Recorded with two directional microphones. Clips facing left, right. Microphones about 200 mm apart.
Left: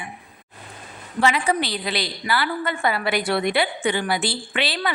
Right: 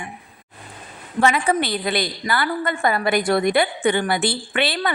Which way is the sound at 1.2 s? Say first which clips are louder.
Right 2 dB; 50° right (ahead or behind).